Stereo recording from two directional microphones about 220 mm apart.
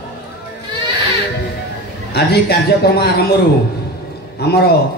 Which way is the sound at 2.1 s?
45° left (ahead or behind).